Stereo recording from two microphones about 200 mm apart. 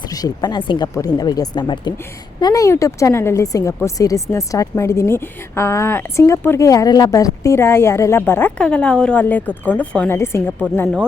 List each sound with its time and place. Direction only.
0.1 s speech: 20° left (ahead or behind)